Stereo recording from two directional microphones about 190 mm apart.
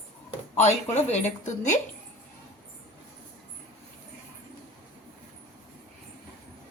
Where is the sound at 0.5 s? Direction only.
35° left (ahead or behind).